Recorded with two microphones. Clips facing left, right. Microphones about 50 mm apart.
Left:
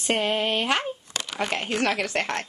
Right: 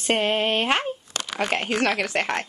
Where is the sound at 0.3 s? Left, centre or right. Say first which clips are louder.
Right 2 dB; right.